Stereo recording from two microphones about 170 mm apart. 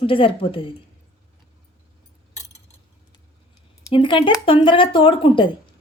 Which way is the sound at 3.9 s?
30° left (ahead or behind).